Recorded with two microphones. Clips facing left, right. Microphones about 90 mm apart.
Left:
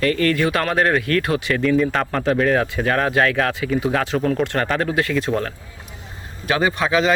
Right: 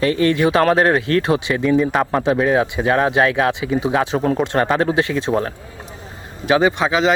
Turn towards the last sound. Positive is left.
turn(degrees=-20)  # may be behind; listen again after turning